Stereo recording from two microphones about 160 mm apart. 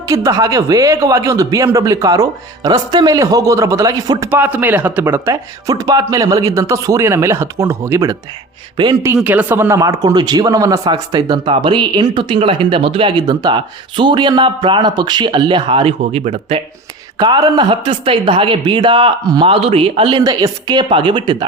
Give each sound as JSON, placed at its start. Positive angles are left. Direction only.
{"t": 0.1, "sound": "speech", "side_deg": -20}
{"t": 4.3, "sound": "speech", "side_deg": -10}
{"t": 8.8, "sound": "speech", "side_deg": -30}
{"t": 9.1, "sound": "speech", "side_deg": -10}
{"t": 17.2, "sound": "speech", "side_deg": -25}